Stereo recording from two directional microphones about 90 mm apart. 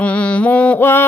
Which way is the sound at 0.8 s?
25° left (ahead or behind).